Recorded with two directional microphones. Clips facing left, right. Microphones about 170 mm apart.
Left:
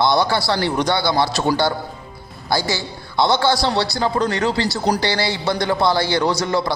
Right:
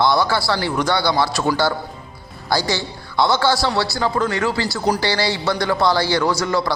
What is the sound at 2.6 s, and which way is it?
Speech, 20° right (ahead or behind).